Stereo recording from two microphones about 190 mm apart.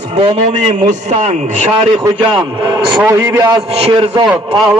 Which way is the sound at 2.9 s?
15° right (ahead or behind).